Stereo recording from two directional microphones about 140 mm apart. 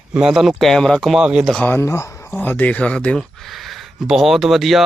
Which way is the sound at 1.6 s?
15° left (ahead or behind).